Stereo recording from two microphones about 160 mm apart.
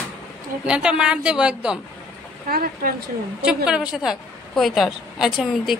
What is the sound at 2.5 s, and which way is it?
Speech, 65° right (ahead or behind).